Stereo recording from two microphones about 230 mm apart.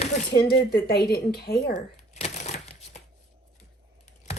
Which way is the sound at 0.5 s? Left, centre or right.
Left.